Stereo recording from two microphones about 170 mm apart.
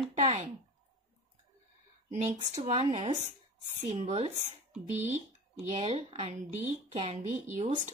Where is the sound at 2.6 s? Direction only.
40° right (ahead or behind).